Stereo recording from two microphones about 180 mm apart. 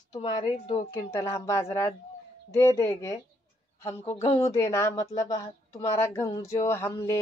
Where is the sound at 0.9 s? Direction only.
15° left (ahead or behind).